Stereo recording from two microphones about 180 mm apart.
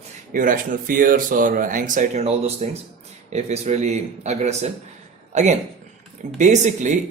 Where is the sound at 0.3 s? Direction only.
50° right (ahead or behind).